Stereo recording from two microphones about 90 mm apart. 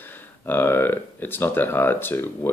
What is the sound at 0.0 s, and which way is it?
Speech, 20° left (ahead or behind).